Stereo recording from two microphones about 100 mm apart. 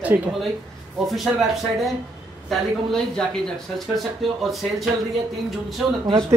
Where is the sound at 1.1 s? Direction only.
Centre (ahead or behind).